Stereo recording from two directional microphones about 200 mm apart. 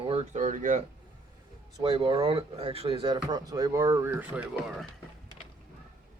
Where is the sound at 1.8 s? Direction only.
25° right (ahead or behind); by 4.4 s 10° right (ahead or behind).